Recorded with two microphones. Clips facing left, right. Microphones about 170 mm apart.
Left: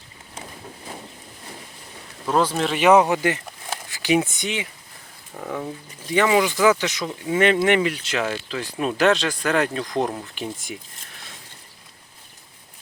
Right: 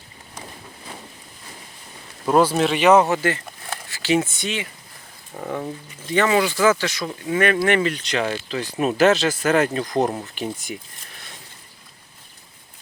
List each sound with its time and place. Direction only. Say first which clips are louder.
2.2 s speech: right 4 dB; 10° right (ahead or behind); by 4.7 s 15° left (ahead or behind)
5.3 s speech: right 1 dB; 5° right (ahead or behind)
6.1 s speech: even; 10° left (ahead or behind)